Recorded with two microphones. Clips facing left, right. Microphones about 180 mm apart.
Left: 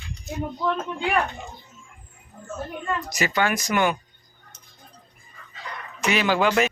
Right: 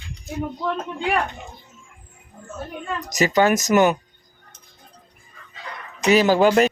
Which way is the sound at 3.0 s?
40° right (ahead or behind).